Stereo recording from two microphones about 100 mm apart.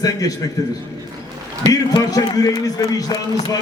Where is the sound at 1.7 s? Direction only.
40° left (ahead or behind).